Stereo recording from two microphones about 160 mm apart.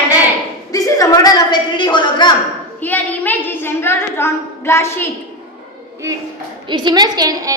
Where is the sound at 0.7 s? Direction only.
20° left (ahead or behind).